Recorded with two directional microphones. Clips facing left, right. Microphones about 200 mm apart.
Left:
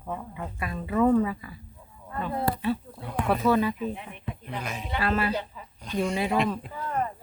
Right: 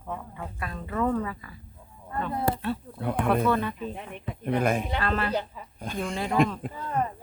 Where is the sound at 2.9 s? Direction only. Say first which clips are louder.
Right 4 dB; 55° right (ahead or behind).